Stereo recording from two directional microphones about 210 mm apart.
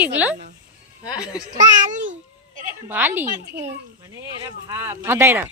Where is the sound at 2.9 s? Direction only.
10° right (ahead or behind).